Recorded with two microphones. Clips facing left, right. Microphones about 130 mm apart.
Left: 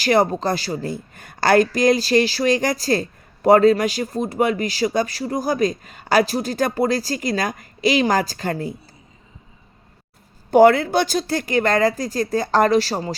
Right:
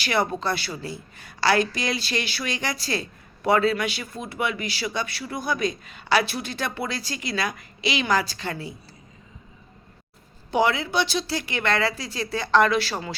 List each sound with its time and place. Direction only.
0.0 s a woman's voice: 40° left (ahead or behind)
10.5 s a woman's voice: 50° left (ahead or behind)